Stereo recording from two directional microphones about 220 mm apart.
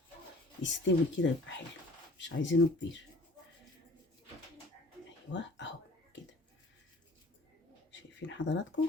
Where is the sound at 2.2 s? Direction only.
55° left (ahead or behind).